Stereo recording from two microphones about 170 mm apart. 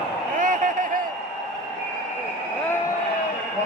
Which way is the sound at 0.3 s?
50° right (ahead or behind).